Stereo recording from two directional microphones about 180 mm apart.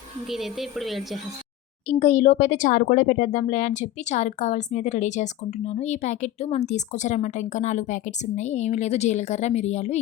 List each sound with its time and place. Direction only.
0.3 s a woman's voice: centre (ahead or behind)
1.9 s speech: 40° left (ahead or behind)